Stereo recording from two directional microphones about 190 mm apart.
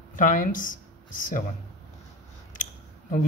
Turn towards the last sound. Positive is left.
turn(degrees=45)  # may be behind; listen again after turning